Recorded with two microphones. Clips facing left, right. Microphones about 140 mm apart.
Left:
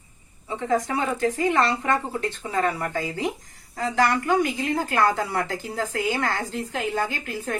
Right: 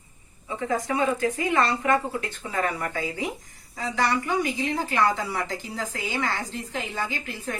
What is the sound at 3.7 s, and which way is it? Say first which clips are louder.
A woman's voice: left 3 dB; 45° left (ahead or behind).